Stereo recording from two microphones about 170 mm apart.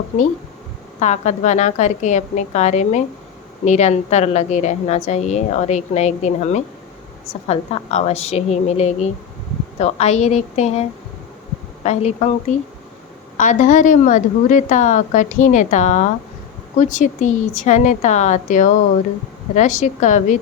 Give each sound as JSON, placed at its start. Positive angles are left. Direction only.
{"t": 0.9, "sound": "a woman's voice", "side_deg": 40}